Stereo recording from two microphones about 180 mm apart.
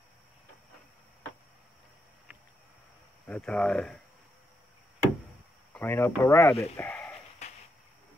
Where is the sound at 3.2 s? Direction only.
5° left (ahead or behind).